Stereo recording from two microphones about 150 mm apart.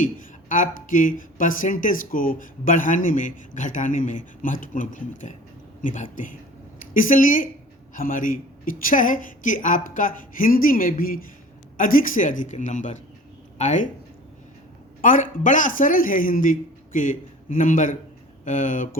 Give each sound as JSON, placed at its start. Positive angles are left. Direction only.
{"t": 0.0, "sound": "speech", "side_deg": 60}
{"t": 15.0, "sound": "speech", "side_deg": 60}